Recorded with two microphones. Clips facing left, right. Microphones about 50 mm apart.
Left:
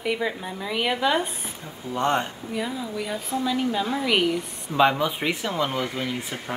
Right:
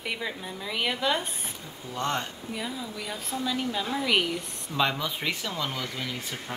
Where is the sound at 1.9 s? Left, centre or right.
Left.